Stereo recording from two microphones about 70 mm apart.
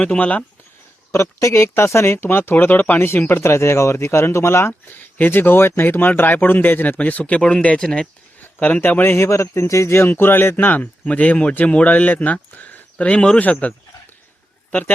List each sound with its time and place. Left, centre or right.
0.0 s speech: centre
1.1 s speech: left
4.9 s speech: left
8.4 s a man's voice: left